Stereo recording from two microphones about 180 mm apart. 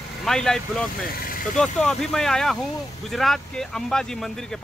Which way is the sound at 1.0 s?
55° left (ahead or behind).